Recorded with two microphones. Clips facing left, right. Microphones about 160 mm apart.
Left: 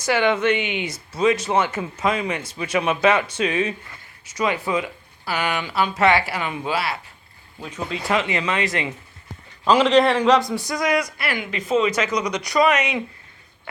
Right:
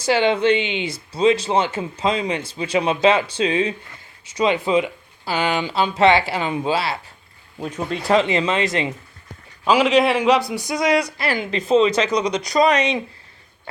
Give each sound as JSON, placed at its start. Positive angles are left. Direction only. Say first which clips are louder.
{"t": 0.0, "sound": "speech", "louder": "right 2 dB", "side_deg": -30}
{"t": 8.1, "sound": "speech", "louder": "right 5 dB", "side_deg": -30}
{"t": 9.6, "sound": "a man's voice", "louder": "even", "side_deg": -5}
{"t": 10.9, "sound": "speech", "louder": "right 3 dB", "side_deg": -30}